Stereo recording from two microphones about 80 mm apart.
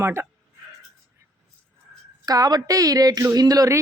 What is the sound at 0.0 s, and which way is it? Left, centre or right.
Speech, right.